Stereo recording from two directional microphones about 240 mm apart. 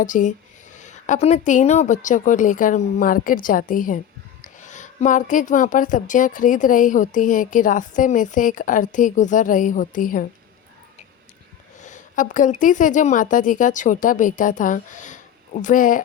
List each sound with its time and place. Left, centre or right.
0.0 s a woman's voice: left
11.8 s a woman's voice: left